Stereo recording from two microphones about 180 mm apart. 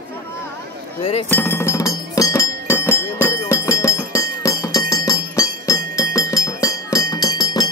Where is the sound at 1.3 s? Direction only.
15° left (ahead or behind).